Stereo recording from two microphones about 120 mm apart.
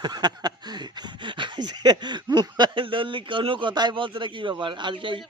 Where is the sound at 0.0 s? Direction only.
35° right (ahead or behind).